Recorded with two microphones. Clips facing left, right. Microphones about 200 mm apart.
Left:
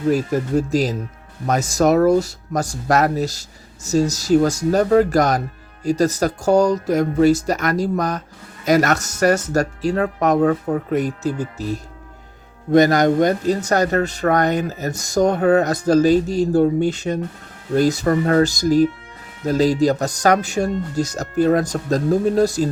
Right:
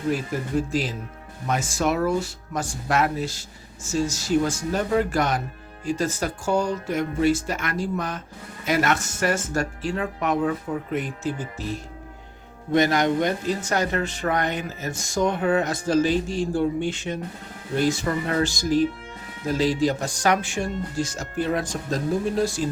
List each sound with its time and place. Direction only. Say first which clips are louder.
0.1 s speech: left 7 dB; 40° left (ahead or behind)
10.4 s speech: left 7 dB; 55° left (ahead or behind)
10.9 s speech: left 6 dB; 40° left (ahead or behind)